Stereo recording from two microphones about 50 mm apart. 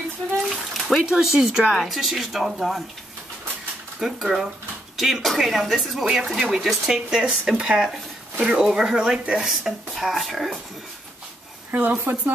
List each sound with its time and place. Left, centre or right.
0.7 s a sound: centre
1.2 s speech: centre
1.7 s speech: centre
4.0 s speech: centre
7.1 s speech: centre
11.7 s speech: right